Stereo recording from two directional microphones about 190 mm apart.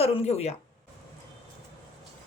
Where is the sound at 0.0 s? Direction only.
30° left (ahead or behind).